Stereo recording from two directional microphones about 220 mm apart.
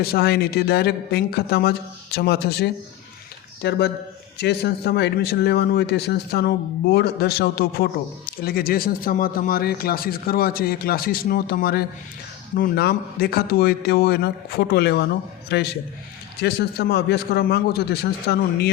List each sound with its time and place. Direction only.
0.0 s speech: 45° left (ahead or behind)